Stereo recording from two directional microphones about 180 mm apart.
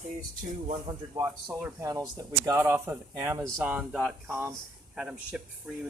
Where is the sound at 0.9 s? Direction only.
30° right (ahead or behind).